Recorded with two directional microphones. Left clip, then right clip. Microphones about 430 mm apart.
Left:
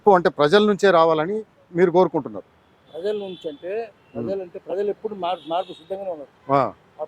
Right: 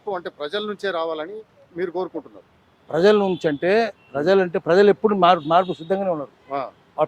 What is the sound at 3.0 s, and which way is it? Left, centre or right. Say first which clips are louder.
Speech: right 10 dB; right.